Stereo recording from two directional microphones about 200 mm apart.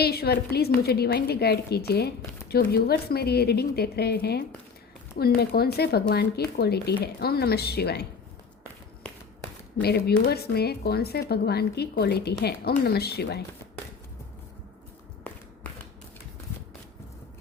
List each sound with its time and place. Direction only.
0.0 s speech: 50° left (ahead or behind)
9.8 s speech: 55° left (ahead or behind)
15.3 s a sound: 10° left (ahead or behind)